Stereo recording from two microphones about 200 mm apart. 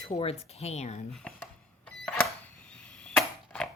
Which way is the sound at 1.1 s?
5° left (ahead or behind).